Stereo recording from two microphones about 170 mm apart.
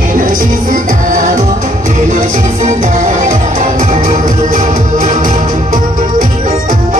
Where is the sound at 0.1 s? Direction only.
55° right (ahead or behind).